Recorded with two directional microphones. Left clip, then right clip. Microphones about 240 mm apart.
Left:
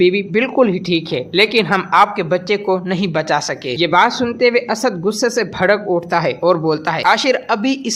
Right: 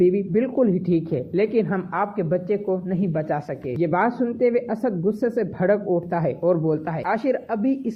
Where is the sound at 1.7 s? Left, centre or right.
Centre.